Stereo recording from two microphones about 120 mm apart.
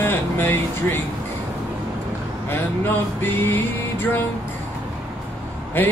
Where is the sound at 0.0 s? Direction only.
20° left (ahead or behind).